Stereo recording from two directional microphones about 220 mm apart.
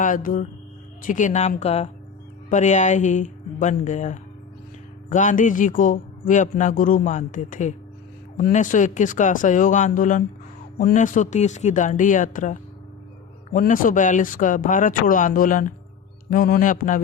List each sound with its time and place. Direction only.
0.0 s speech: 40° left (ahead or behind)